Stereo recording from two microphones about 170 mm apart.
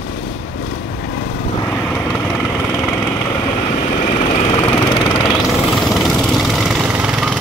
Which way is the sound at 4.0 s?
40° left (ahead or behind).